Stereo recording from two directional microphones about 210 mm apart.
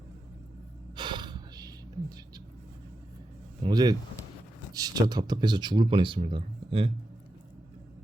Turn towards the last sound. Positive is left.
turn(degrees=-25)  # may be behind; listen again after turning